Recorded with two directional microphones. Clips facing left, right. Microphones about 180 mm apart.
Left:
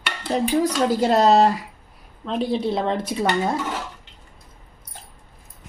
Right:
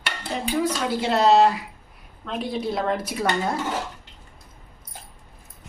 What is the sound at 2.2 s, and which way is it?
A woman's voice, 30° left (ahead or behind).